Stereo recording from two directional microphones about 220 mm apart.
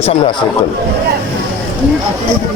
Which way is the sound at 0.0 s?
30° left (ahead or behind).